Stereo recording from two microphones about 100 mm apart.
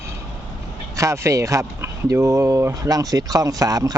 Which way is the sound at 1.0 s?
30° right (ahead or behind).